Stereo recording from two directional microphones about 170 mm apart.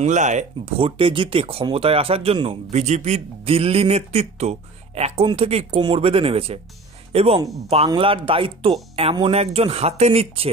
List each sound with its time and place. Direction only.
0.0 s speech: 45° right (ahead or behind)